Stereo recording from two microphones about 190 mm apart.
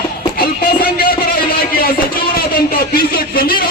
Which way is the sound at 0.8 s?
50° left (ahead or behind).